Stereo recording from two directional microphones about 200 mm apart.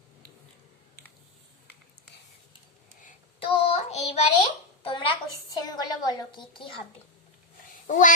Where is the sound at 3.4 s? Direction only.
25° left (ahead or behind).